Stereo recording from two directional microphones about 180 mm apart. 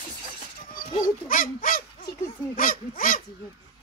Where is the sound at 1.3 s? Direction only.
50° left (ahead or behind).